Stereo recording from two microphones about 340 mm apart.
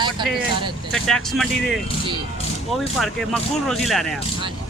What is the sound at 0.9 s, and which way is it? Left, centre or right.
Speech, centre.